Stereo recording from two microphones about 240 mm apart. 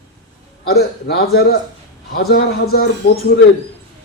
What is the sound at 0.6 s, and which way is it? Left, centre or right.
Speech, left.